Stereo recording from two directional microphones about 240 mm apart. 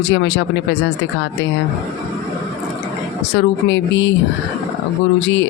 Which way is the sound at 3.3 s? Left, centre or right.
Left.